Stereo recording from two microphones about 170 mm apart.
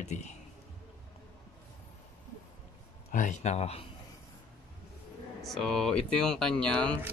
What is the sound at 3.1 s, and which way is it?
Speech, 45° left (ahead or behind).